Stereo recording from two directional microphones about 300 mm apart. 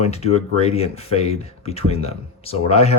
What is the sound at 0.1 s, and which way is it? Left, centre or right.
Speech, left.